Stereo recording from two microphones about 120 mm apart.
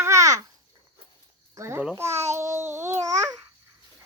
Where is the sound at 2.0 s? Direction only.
20° right (ahead or behind).